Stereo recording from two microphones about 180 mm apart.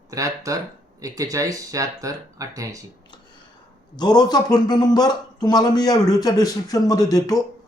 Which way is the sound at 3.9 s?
20° left (ahead or behind).